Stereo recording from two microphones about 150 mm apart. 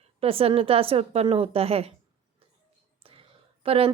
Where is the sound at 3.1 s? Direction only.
40° right (ahead or behind).